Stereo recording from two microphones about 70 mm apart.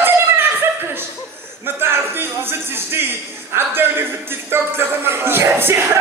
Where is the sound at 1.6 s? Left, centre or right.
Right.